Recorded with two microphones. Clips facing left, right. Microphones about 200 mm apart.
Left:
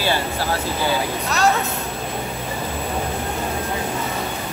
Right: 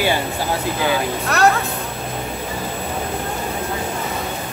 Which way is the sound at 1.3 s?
60° right (ahead or behind).